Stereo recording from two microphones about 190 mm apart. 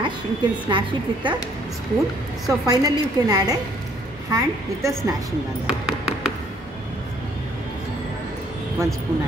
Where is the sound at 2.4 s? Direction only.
20° right (ahead or behind).